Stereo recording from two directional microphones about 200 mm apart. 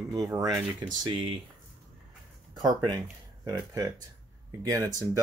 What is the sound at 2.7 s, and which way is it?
Speech, 20° right (ahead or behind).